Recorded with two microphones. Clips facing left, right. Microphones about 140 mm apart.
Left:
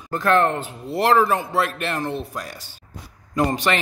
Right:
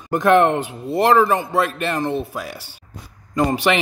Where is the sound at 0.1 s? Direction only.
15° right (ahead or behind).